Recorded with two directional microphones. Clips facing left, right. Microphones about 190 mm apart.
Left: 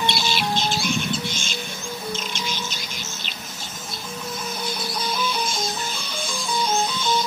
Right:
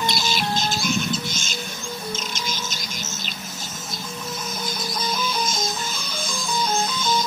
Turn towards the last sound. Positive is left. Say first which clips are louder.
# right 1 dB
turn(degrees=-40)  # may be behind; listen again after turning